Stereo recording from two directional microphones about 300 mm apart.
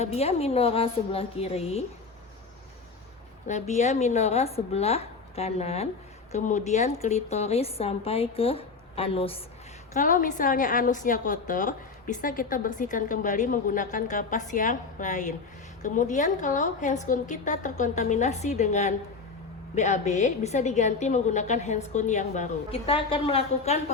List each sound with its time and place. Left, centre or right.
0.0 s a woman's voice: left
3.4 s a woman's voice: left